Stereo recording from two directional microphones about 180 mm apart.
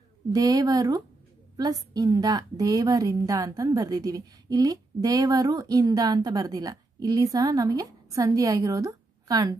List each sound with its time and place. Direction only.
0.3 s a woman's voice: 20° right (ahead or behind)